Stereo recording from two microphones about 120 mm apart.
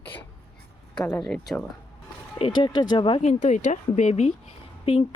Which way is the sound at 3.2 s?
85° left.